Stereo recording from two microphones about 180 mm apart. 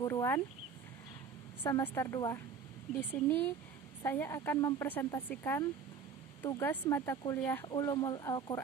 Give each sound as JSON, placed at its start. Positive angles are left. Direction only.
{"t": 0.0, "sound": "speech", "side_deg": 15}
{"t": 1.6, "sound": "speech", "side_deg": 15}
{"t": 7.7, "sound": "speech", "side_deg": 20}